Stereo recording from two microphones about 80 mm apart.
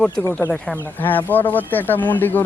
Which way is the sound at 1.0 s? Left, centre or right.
Left.